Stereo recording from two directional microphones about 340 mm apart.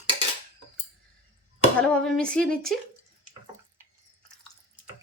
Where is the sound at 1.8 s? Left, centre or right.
Centre.